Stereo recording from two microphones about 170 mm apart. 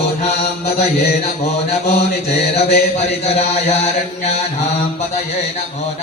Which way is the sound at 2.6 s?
40° left (ahead or behind).